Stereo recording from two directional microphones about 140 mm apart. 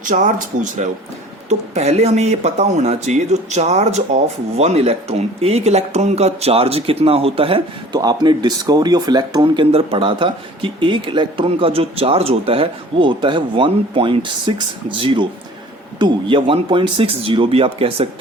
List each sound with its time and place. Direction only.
0.0 s speech: 65° right (ahead or behind)
1.5 s speech: 50° right (ahead or behind)
7.9 s speech: 30° right (ahead or behind)